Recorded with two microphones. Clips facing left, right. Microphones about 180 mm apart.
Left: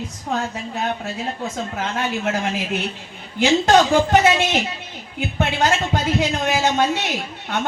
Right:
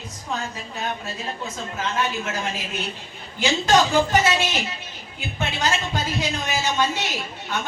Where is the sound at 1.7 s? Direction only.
60° left (ahead or behind).